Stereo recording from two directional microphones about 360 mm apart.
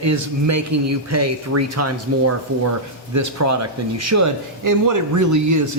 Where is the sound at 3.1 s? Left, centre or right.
Right.